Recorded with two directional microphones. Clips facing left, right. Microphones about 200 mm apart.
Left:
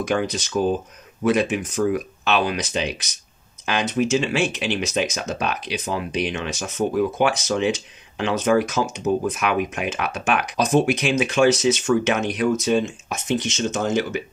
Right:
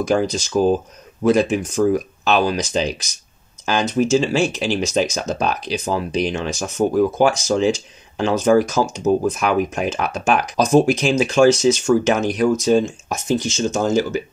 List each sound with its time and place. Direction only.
0.1 s speech: 35° right (ahead or behind)